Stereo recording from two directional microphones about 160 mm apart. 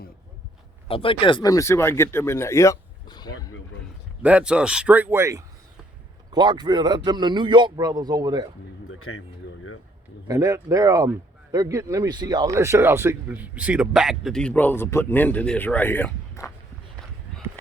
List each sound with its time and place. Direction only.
0.9 s speech: 35° left (ahead or behind)
4.2 s a man's voice: 10° right (ahead or behind); by 8.4 s 25° right (ahead or behind)
10.2 s speech: 20° right (ahead or behind); by 16.5 s 15° left (ahead or behind)